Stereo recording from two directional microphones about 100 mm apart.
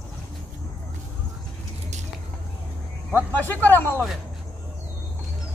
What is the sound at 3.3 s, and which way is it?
Speech, 20° left (ahead or behind).